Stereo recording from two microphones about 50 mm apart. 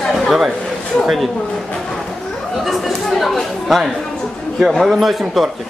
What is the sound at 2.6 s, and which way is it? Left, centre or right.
Chatter, centre.